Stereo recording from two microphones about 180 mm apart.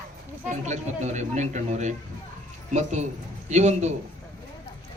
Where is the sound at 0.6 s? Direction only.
40° right (ahead or behind).